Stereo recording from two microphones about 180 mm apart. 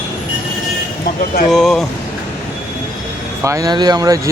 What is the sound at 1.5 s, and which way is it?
Speech, centre (ahead or behind).